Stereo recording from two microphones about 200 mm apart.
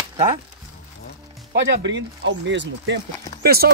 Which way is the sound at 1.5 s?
60° right (ahead or behind).